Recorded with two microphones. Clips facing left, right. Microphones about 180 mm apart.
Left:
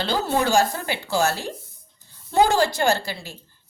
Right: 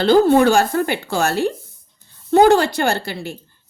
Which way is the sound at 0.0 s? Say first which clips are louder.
Right 11 dB; 55° right (ahead or behind).